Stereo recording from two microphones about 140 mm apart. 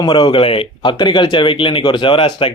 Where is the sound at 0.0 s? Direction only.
35° left (ahead or behind).